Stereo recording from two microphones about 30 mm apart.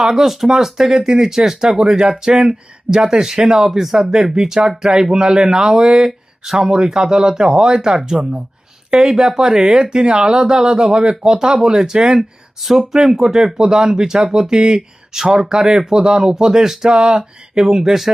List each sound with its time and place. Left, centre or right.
0.0 s speech: centre
6.4 s speech: centre
6.7 s speech: centre
12.9 s speech: centre